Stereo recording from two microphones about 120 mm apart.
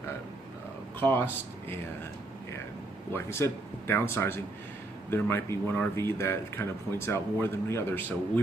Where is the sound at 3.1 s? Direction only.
20° left (ahead or behind).